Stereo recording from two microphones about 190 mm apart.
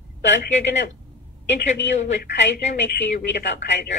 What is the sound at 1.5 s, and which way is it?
A woman's voice, 65° left (ahead or behind).